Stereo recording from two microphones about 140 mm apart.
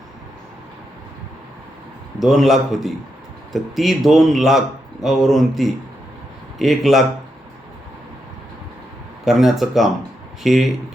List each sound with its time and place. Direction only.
2.1 s speech: centre (ahead or behind)
9.2 s speech: centre (ahead or behind)